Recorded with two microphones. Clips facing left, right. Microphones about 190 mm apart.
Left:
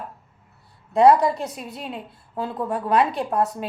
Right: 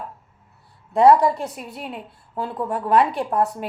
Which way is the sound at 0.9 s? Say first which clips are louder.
Right 1 dB; 15° left (ahead or behind).